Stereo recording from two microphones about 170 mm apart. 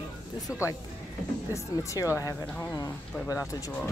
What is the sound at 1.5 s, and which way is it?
Speech, 20° left (ahead or behind).